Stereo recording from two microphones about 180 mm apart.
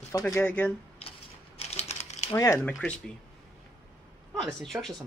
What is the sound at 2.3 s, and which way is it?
Speech, 15° left (ahead or behind).